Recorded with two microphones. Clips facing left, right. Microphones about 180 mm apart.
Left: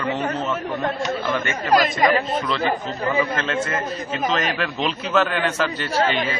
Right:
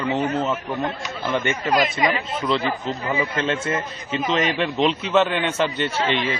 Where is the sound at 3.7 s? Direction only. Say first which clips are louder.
Even; 50° left (ahead or behind).